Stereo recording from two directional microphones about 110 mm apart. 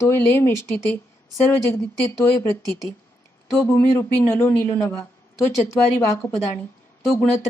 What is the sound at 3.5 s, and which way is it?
Speech, 20° left (ahead or behind).